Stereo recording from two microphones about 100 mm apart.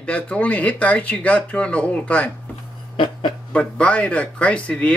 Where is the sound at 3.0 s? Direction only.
55° left (ahead or behind).